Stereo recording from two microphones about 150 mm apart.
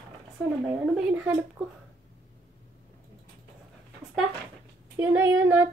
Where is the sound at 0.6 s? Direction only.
10° right (ahead or behind).